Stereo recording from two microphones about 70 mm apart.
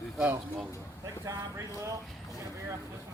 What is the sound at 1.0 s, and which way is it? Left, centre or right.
Speech, right.